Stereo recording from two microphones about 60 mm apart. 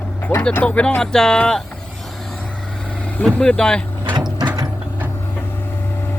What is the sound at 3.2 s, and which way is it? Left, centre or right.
Speech, centre.